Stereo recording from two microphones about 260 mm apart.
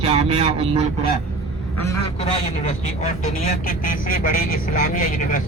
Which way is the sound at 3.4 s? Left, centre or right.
Left.